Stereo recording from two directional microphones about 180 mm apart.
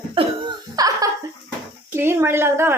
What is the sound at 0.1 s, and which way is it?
Cough, 25° right (ahead or behind).